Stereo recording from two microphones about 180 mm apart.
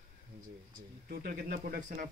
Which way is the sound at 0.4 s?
50° right (ahead or behind).